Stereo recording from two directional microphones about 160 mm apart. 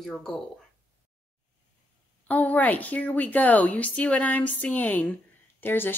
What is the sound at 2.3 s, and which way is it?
A woman's voice, 10° left (ahead or behind).